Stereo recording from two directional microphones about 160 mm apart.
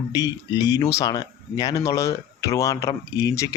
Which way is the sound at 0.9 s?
25° left (ahead or behind).